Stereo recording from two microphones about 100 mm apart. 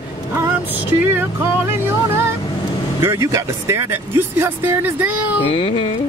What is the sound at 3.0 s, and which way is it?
Speech, 30° right (ahead or behind).